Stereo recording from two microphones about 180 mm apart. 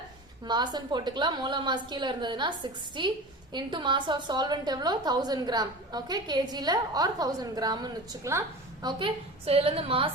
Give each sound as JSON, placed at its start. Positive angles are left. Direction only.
{"t": 0.4, "sound": "a woman's voice", "side_deg": -25}